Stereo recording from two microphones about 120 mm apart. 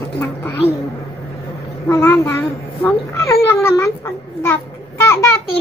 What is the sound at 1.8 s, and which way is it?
Child singing, 20° left (ahead or behind).